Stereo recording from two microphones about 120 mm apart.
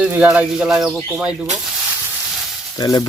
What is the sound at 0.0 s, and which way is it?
Speech, 10° right (ahead or behind).